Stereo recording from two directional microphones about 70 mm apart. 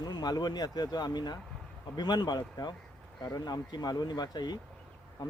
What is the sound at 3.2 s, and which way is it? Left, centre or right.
Speech, left.